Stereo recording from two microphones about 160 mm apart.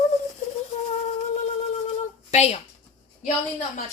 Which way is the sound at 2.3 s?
40° left (ahead or behind).